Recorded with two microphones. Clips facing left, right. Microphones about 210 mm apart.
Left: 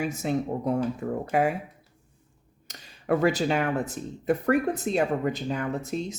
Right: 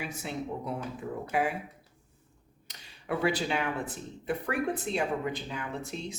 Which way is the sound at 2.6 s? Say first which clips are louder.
Left 9 dB; 45° left (ahead or behind).